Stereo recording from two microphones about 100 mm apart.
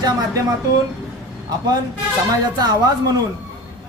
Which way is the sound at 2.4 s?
45° right (ahead or behind).